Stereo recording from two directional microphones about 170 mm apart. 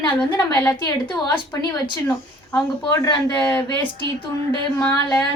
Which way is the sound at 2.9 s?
20° left (ahead or behind).